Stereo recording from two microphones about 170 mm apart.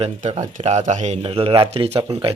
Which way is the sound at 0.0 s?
40° right (ahead or behind).